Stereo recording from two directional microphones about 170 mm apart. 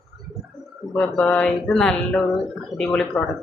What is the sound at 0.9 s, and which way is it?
Speech, 5° left (ahead or behind).